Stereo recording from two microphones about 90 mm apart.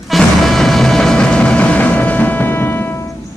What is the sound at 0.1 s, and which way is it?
Music, 5° left (ahead or behind).